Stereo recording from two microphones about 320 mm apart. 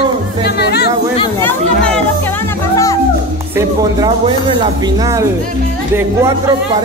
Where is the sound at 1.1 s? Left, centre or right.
Centre.